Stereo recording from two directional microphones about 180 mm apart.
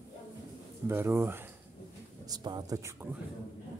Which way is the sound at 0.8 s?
10° right (ahead or behind).